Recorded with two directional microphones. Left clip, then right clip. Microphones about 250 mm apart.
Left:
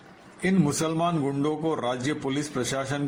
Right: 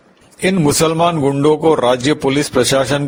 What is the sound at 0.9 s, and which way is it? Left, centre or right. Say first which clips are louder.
A man's voice: right 12 dB; right.